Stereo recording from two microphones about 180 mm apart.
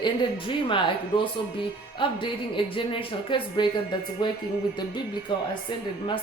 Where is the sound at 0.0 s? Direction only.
30° left (ahead or behind).